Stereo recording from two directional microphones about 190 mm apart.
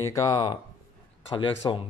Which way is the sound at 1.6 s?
20° left (ahead or behind).